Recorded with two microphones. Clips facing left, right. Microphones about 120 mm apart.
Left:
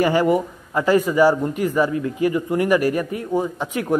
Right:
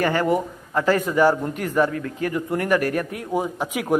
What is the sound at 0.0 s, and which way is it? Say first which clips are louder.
A man's voice: left 3 dB; 10° left (ahead or behind).